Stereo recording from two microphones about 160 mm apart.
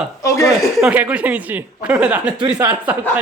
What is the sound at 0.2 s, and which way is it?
Speech, 20° left (ahead or behind).